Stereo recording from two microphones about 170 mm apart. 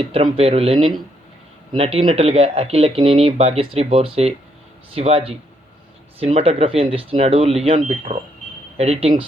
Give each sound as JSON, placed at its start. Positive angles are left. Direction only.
{"t": 0.0, "sound": "speech", "side_deg": -35}